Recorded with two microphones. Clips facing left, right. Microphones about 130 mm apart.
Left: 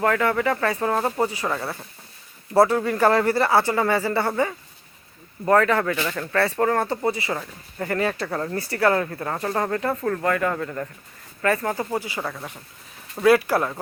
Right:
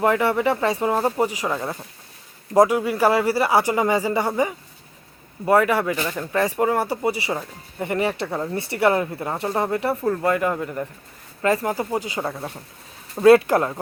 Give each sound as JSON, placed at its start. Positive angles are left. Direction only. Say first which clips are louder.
{"t": 0.0, "sound": "speech", "louder": "right 2 dB", "side_deg": -15}
{"t": 8.5, "sound": "speech", "louder": "right 1 dB", "side_deg": -25}